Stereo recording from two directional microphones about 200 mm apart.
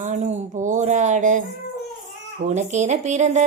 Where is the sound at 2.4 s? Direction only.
35° right (ahead or behind).